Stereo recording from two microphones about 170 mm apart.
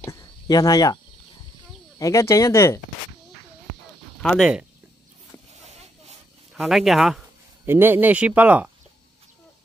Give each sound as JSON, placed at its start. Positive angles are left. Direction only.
{"t": 0.0, "sound": "cricket", "side_deg": 20}
{"t": 2.0, "sound": "speech", "side_deg": 20}
{"t": 4.2, "sound": "speech", "side_deg": 0}
{"t": 6.5, "sound": "speech", "side_deg": 0}
{"t": 7.6, "sound": "speech", "side_deg": -10}